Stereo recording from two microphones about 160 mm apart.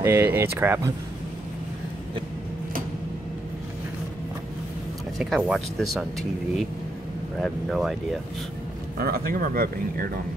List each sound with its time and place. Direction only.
0.0 s speech: 15° right (ahead or behind)
5.2 s speech: centre (ahead or behind)
7.3 s speech: centre (ahead or behind)
8.9 s speech: 70° right (ahead or behind)